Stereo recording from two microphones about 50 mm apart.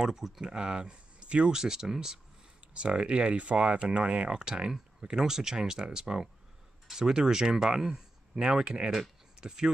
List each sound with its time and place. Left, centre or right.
0.0 s speech: centre
2.7 s speech: right